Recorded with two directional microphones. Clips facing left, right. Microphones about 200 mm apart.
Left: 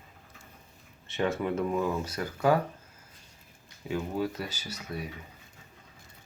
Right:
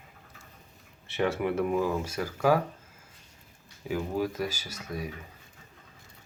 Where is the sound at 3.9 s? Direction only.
15° right (ahead or behind).